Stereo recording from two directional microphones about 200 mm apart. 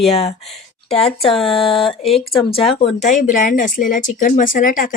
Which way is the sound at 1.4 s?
Centre (ahead or behind).